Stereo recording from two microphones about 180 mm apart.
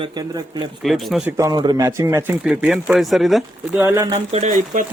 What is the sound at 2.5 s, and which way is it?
Speech, 5° right (ahead or behind).